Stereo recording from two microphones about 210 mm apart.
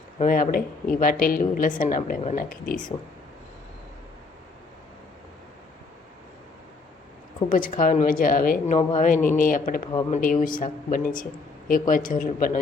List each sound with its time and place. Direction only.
0.2 s a woman's voice: 40° left (ahead or behind)
7.5 s a woman's voice: 40° left (ahead or behind)